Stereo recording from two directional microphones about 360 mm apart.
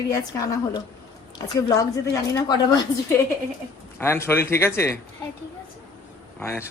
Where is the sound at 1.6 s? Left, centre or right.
Centre.